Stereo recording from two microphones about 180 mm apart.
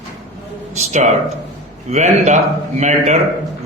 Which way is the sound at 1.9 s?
40° right (ahead or behind).